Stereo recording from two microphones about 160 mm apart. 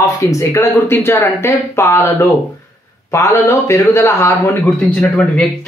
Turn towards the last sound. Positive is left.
turn(degrees=10)  # may be behind; listen again after turning